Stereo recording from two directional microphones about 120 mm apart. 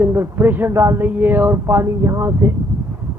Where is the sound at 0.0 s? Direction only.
20° right (ahead or behind).